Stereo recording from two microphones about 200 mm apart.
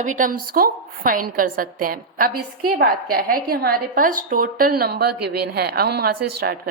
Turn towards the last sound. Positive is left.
turn(degrees=-50)  # may be behind; listen again after turning